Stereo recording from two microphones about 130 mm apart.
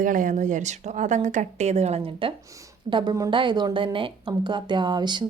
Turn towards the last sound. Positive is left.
turn(degrees=-35)  # may be behind; listen again after turning